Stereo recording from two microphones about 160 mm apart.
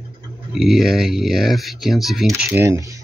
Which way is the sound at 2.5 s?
20° right (ahead or behind).